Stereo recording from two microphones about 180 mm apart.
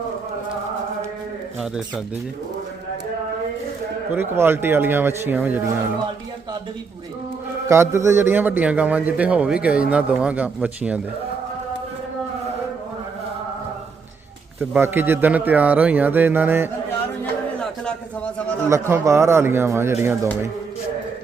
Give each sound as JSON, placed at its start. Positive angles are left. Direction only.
{"t": 1.5, "sound": "a sound", "side_deg": 0}
{"t": 4.1, "sound": "a man's voice", "side_deg": -10}
{"t": 7.7, "sound": "a man's voice", "side_deg": -15}
{"t": 14.6, "sound": "a man's voice", "side_deg": -10}
{"t": 18.7, "sound": "a man's voice", "side_deg": -15}